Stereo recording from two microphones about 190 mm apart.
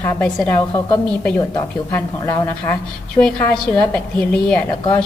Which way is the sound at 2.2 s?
15° left (ahead or behind).